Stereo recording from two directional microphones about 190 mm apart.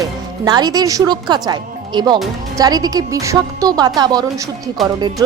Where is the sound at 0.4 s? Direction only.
20° right (ahead or behind).